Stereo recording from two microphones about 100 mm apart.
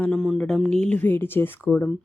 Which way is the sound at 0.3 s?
5° left (ahead or behind).